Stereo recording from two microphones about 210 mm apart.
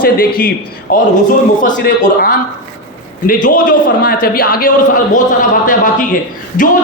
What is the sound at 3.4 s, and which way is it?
A man's voice, 40° left (ahead or behind).